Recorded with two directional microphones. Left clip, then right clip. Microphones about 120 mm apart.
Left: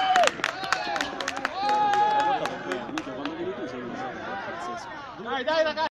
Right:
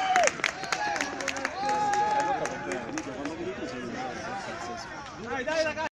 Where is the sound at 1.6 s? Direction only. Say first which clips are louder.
Left 5 dB; 45° right (ahead or behind).